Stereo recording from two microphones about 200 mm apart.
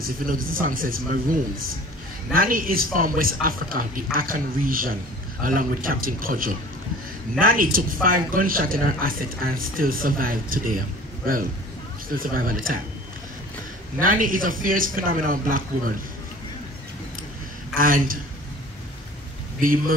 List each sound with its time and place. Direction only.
0.0 s speech: 45° right (ahead or behind)
12.1 s speech: 45° right (ahead or behind)
13.9 s speech: 45° right (ahead or behind)
17.7 s speech: 45° right (ahead or behind)